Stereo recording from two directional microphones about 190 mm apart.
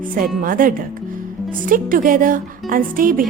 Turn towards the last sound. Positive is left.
turn(degrees=-45)  # may be behind; listen again after turning